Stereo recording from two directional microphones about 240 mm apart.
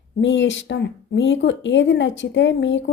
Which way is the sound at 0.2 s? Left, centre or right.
Left.